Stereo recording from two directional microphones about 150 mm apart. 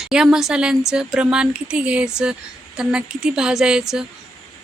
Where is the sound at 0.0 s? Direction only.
5° right (ahead or behind).